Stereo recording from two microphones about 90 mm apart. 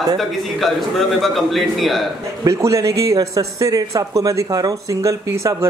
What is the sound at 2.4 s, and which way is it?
Speech, 35° right (ahead or behind).